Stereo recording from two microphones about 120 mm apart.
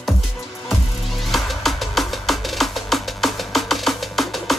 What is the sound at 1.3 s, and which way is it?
Music, centre (ahead or behind).